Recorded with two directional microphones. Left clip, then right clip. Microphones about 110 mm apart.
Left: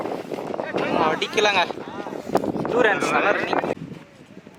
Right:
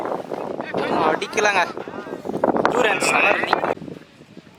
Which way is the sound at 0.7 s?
Centre (ahead or behind).